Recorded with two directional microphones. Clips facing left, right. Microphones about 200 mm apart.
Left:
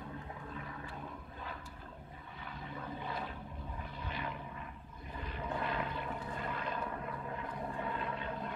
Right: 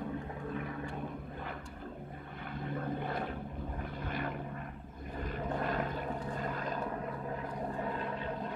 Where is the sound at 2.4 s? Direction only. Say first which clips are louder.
Right 7 dB; 55° right (ahead or behind).